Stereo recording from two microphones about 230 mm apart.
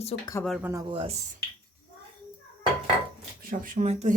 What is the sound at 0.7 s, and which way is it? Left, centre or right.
Speech, centre.